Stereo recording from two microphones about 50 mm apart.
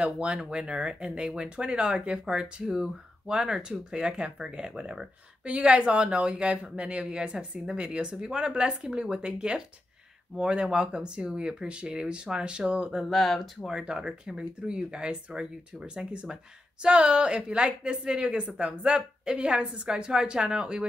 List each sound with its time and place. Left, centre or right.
0.0 s speech: right
13.1 s speech: centre
13.7 s speech: centre